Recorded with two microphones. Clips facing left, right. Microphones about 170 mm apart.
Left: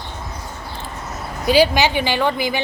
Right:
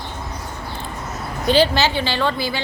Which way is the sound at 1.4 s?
10° left (ahead or behind).